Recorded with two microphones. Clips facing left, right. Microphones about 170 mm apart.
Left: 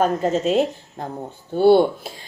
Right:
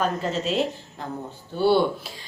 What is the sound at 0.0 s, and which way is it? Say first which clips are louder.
A woman's voice: left 6 dB; 50° left (ahead or behind).